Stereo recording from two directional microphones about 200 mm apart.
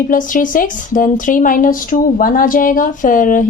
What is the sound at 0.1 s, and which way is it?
Speech, 40° left (ahead or behind).